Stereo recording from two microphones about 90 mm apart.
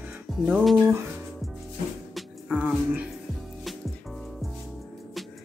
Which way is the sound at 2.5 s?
15° right (ahead or behind).